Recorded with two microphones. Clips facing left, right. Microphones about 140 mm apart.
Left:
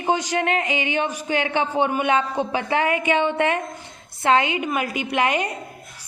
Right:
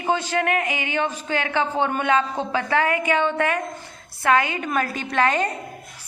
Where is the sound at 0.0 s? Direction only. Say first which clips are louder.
Left 1 dB; 15° left (ahead or behind).